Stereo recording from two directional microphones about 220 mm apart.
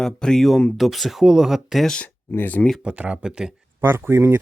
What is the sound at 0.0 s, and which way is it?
Speech, centre (ahead or behind).